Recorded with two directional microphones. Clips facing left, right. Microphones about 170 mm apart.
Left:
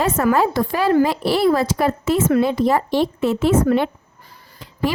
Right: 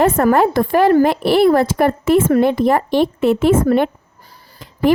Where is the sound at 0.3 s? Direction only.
55° right (ahead or behind).